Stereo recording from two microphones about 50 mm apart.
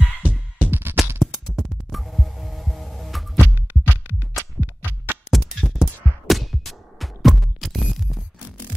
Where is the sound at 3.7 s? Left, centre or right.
Right.